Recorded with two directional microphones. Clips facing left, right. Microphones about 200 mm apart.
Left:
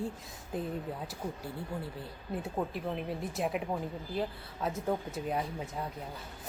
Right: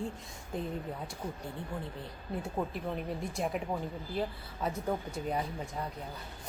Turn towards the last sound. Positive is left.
turn(degrees=0)  # may be behind; listen again after turning